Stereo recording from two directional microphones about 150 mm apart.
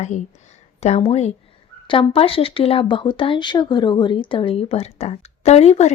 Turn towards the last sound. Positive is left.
turn(degrees=45)  # may be behind; listen again after turning